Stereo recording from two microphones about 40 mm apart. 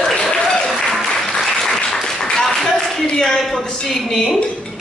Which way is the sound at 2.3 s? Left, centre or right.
Centre.